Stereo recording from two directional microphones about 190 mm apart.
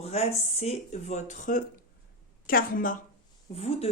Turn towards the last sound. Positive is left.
turn(degrees=30)  # may be behind; listen again after turning